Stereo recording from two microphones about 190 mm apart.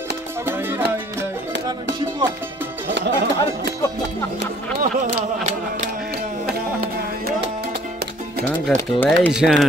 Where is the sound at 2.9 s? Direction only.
60° right (ahead or behind).